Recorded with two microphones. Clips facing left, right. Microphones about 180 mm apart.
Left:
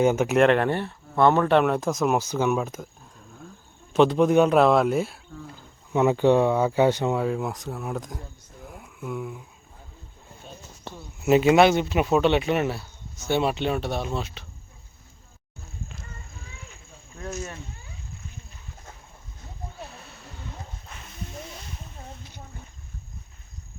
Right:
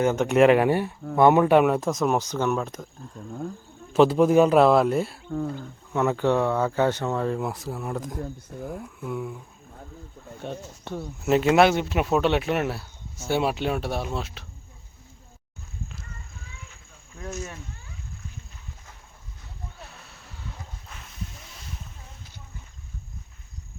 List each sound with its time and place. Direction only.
0.0 s speech: 10° left (ahead or behind)
0.4 s speech: 10° right (ahead or behind); by 2.8 s 10° left (ahead or behind)
3.9 s speech: centre (ahead or behind)
5.9 s speech: 15° left (ahead or behind); by 9.4 s centre (ahead or behind)
10.4 s speech: 65° right (ahead or behind)
11.3 s speech: 5° left (ahead or behind)
17.2 s speech: centre (ahead or behind)
20.1 s a sound: centre (ahead or behind)